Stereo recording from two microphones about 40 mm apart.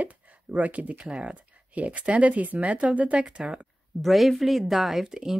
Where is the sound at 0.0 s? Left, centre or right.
Right.